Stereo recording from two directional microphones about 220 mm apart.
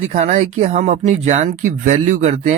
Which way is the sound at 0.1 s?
30° right (ahead or behind).